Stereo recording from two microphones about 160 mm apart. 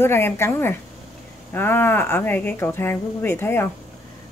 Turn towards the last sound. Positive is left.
turn(degrees=15)  # may be behind; listen again after turning